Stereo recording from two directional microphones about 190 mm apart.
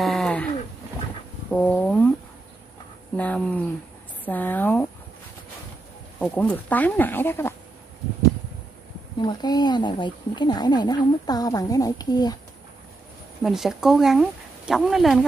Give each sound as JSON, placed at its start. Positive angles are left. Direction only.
{"t": 0.0, "sound": "a sound", "side_deg": 0}
{"t": 1.5, "sound": "a sound", "side_deg": 5}
{"t": 3.2, "sound": "speech", "side_deg": 5}
{"t": 6.3, "sound": "speech", "side_deg": 10}
{"t": 9.2, "sound": "speech", "side_deg": 20}
{"t": 13.4, "sound": "speech", "side_deg": 0}